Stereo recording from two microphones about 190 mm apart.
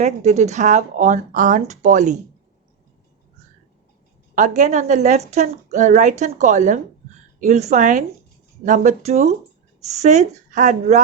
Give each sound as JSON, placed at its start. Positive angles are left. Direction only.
{"t": 0.0, "sound": "speech", "side_deg": -35}
{"t": 4.4, "sound": "speech", "side_deg": -40}